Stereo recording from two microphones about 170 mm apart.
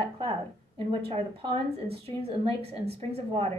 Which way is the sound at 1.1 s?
30° right (ahead or behind).